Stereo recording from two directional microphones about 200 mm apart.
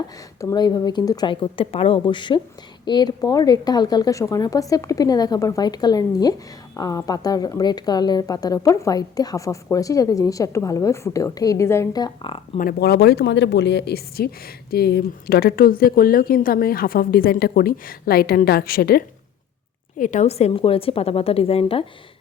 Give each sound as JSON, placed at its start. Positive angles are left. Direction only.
{"t": 0.4, "sound": "a woman's voice", "side_deg": 20}
{"t": 12.5, "sound": "a woman's voice", "side_deg": 50}